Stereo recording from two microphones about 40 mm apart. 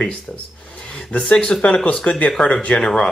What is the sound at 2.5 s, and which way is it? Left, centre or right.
Speech, left.